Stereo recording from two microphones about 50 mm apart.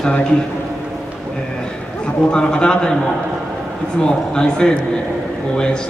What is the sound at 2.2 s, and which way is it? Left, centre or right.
A man's voice, centre.